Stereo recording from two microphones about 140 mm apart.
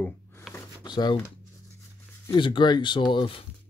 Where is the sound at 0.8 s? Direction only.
30° left (ahead or behind).